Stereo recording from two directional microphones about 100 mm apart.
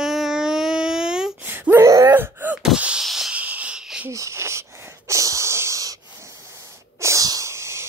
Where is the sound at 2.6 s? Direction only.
10° right (ahead or behind).